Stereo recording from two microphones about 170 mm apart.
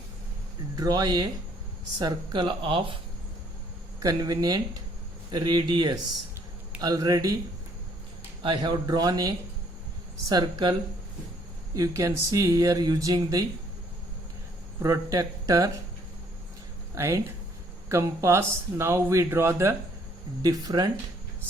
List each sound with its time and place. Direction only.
0.8 s speech: 20° right (ahead or behind)
4.0 s speech: 20° right (ahead or behind)
8.4 s speech: 25° right (ahead or behind)
14.8 s speech: 20° right (ahead or behind)
16.9 s speech: 20° right (ahead or behind)